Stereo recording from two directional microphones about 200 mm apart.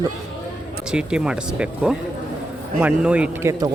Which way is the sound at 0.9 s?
5° right (ahead or behind).